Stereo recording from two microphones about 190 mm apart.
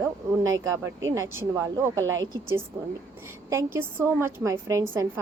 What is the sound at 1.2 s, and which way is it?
Speech, 90° right.